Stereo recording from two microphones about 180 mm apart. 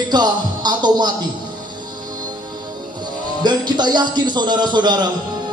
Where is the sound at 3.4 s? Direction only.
25° right (ahead or behind).